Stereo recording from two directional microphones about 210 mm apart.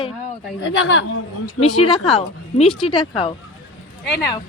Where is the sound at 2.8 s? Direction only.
25° left (ahead or behind).